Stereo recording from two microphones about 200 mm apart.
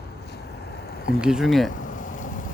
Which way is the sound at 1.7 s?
40° left (ahead or behind).